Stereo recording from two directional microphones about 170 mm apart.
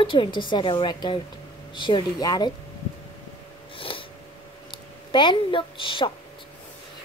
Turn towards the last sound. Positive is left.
turn(degrees=30)  # may be behind; listen again after turning